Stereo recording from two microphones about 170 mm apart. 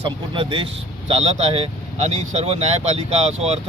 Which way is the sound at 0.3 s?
30° right (ahead or behind).